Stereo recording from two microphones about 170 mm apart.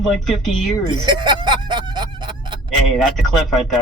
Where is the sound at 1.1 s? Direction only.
25° right (ahead or behind).